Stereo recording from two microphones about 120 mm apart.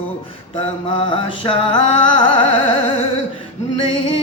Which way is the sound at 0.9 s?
45° left (ahead or behind).